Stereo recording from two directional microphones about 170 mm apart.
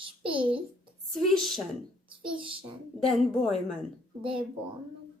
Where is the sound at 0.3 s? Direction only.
30° right (ahead or behind).